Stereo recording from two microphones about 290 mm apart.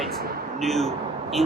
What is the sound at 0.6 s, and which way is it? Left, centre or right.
Speech, centre.